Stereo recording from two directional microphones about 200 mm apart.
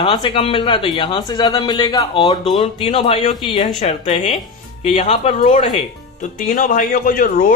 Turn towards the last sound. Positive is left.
turn(degrees=45)  # may be behind; listen again after turning